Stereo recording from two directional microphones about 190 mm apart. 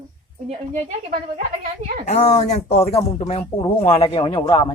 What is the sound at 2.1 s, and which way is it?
Speech, 35° left (ahead or behind).